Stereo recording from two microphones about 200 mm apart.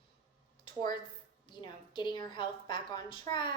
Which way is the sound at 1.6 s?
20° left (ahead or behind).